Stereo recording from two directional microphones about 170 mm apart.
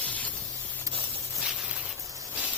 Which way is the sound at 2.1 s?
20° right (ahead or behind).